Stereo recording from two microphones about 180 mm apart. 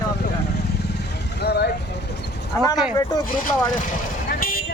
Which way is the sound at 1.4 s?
65° left (ahead or behind).